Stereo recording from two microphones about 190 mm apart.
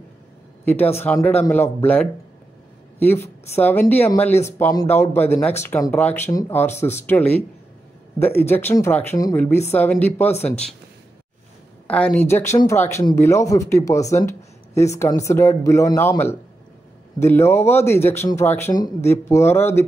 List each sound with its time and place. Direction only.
0.9 s speech: 10° left (ahead or behind)
10.3 s speech: 35° left (ahead or behind)
11.9 s speech: 5° left (ahead or behind)